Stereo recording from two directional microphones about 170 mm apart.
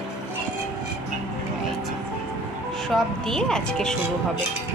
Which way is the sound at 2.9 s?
5° left (ahead or behind).